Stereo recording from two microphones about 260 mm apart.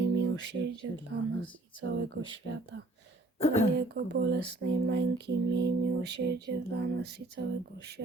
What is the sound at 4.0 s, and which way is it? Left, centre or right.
Speech, right.